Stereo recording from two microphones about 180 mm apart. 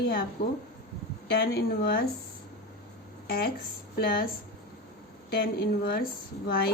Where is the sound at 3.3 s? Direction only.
60° left (ahead or behind).